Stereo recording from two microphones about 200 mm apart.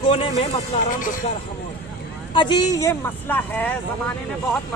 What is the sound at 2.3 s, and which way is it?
Speech, 20° left (ahead or behind).